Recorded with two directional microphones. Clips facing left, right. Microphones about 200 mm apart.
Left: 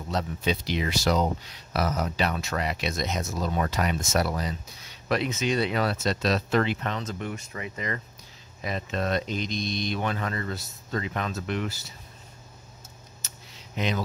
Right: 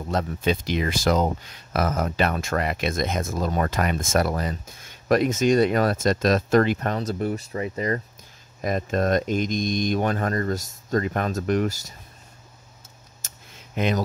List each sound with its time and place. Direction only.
0.1 s speech: 50° right (ahead or behind)
8.5 s speech: 45° right (ahead or behind)
13.2 s a sound: 50° right (ahead or behind)